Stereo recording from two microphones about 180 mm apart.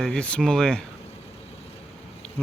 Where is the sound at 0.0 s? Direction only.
5° left (ahead or behind).